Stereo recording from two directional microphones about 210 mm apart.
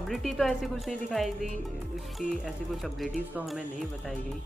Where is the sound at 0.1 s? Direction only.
Centre (ahead or behind).